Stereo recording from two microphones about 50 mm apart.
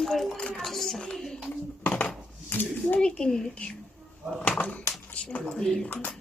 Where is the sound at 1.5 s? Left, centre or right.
Left.